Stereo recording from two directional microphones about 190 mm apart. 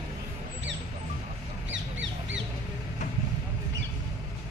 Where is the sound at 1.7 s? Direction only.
75° right (ahead or behind).